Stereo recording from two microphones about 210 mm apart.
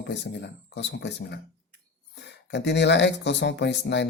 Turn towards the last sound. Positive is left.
turn(degrees=55)  # may be behind; listen again after turning